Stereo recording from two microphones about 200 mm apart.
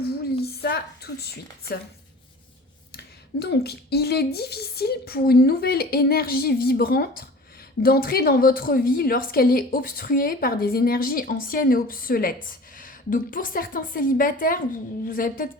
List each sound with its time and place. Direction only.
0.4 s a woman's voice: 50° left (ahead or behind)
2.9 s a woman's voice: 55° left (ahead or behind)